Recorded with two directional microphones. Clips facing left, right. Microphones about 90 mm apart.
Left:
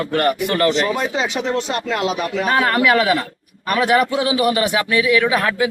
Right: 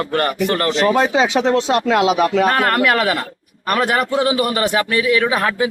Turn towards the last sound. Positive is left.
turn(degrees=-35)  # may be behind; listen again after turning